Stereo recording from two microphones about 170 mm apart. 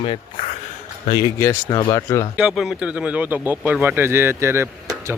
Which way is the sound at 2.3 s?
5° right (ahead or behind).